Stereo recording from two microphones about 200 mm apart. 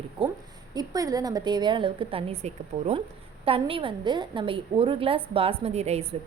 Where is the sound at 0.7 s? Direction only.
20° right (ahead or behind).